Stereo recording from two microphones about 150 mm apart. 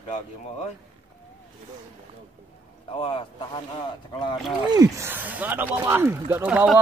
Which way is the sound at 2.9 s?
35° left (ahead or behind).